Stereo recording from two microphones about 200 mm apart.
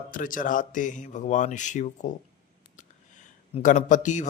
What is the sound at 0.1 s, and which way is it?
A man's voice, 40° left (ahead or behind).